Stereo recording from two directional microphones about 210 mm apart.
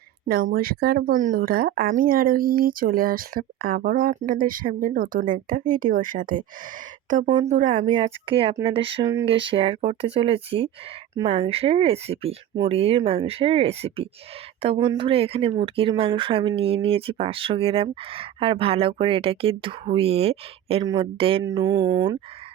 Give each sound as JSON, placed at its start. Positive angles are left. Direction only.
{"t": 0.3, "sound": "speech", "side_deg": -45}